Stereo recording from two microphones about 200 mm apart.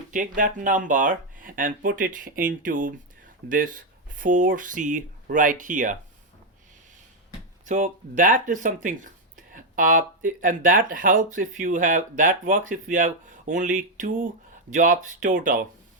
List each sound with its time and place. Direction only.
0.1 s speech: 40° right (ahead or behind)
7.7 s speech: 40° right (ahead or behind)
9.5 s a sound: 40° right (ahead or behind)
10.2 s speech: 40° right (ahead or behind)